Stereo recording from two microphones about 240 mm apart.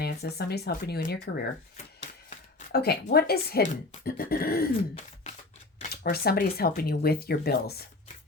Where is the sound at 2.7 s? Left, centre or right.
Left.